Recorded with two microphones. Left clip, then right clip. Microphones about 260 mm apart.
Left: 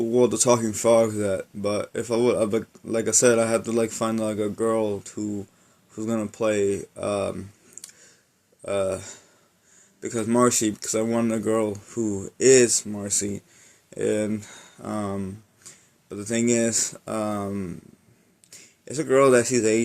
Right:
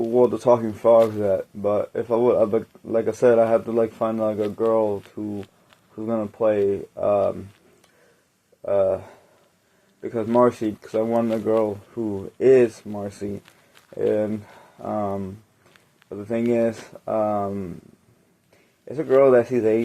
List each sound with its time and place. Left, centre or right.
0.1 s speech: left
0.5 s speech: left
7.8 s a sound: left
8.6 s speech: left
18.9 s speech: left